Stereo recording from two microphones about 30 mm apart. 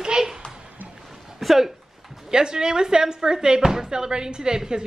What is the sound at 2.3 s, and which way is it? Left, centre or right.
Speech, right.